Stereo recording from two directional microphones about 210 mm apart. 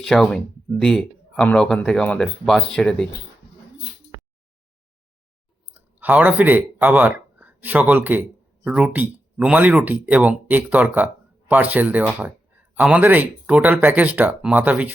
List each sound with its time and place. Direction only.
0.0 s speech: centre (ahead or behind)
5.7 s speech: 10° right (ahead or behind)